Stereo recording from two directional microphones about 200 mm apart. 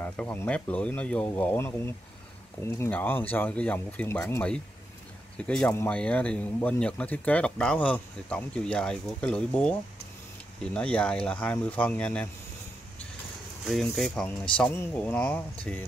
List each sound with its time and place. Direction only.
0.0 s speech: 10° left (ahead or behind)
13.7 s speech: centre (ahead or behind)